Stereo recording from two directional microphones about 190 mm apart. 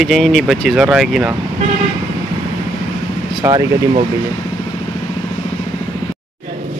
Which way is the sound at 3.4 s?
15° right (ahead or behind).